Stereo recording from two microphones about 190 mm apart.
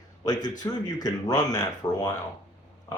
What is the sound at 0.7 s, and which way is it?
A man's voice, 15° left (ahead or behind).